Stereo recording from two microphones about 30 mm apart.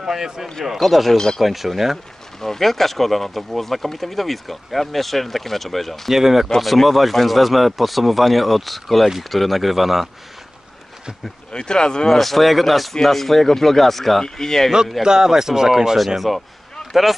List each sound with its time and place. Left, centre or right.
0.1 s speech: centre
0.7 s speech: centre
1.1 s speech: centre
1.4 s speech: centre
2.4 s speech: centre
6.1 s speech: centre
6.6 s speech: centre
11.5 s speech: left
12.1 s speech: centre
14.2 s speech: centre
15.0 s speech: centre
16.2 s speech: centre